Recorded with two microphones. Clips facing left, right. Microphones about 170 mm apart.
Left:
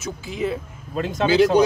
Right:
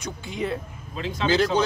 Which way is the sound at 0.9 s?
50° left (ahead or behind).